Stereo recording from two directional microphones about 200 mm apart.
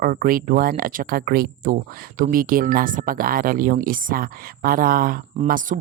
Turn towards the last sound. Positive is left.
turn(degrees=-40)  # may be behind; listen again after turning